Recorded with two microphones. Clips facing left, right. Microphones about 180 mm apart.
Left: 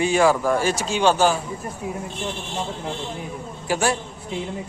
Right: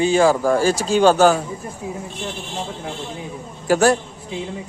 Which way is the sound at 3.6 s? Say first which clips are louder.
Right 7 dB; 45° right (ahead or behind).